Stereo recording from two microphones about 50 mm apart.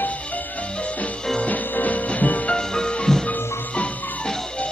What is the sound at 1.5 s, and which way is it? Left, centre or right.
Music, left.